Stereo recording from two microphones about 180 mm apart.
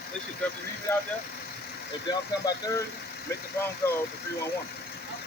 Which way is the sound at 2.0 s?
20° left (ahead or behind).